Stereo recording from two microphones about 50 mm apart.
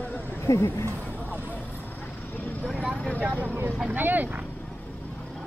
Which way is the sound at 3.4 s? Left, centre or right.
Right.